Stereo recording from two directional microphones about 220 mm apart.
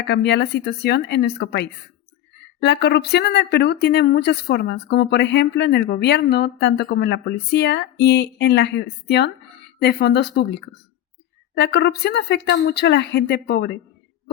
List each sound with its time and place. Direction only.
0.1 s speech: 50° left (ahead or behind)
11.5 s speech: 50° left (ahead or behind)